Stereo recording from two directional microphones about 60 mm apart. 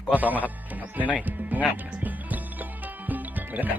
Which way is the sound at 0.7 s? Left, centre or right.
Right.